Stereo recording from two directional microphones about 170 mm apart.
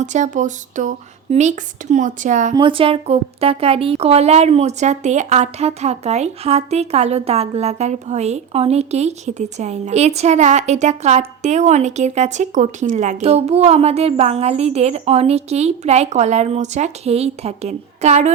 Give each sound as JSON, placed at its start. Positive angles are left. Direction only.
{"t": 0.0, "sound": "speech", "side_deg": -45}
{"t": 2.6, "sound": "a woman's voice", "side_deg": -30}